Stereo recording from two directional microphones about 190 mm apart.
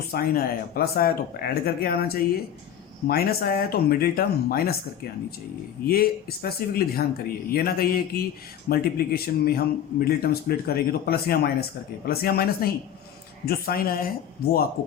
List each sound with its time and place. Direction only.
0.1 s a man's voice: 50° left (ahead or behind)
5.9 s a man's voice: 50° left (ahead or behind)